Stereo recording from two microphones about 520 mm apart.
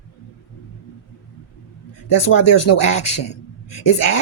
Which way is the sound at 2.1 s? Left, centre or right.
Left.